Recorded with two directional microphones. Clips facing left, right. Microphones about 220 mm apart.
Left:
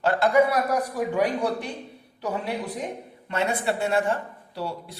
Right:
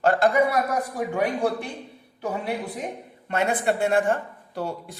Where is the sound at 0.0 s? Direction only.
45° right (ahead or behind).